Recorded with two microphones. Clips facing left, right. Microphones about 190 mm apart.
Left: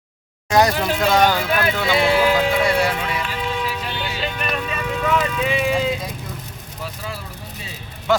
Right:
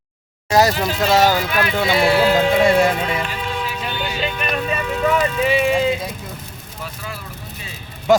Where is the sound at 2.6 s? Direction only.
25° right (ahead or behind).